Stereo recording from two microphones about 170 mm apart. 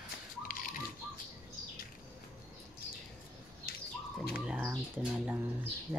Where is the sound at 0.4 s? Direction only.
55° left (ahead or behind).